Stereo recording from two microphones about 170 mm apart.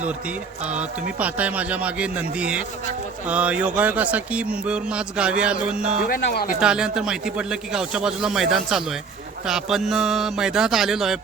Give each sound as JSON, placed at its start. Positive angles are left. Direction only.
{"t": 0.1, "sound": "speech", "side_deg": -5}
{"t": 6.1, "sound": "speech", "side_deg": 60}
{"t": 6.6, "sound": "a man's voice", "side_deg": -5}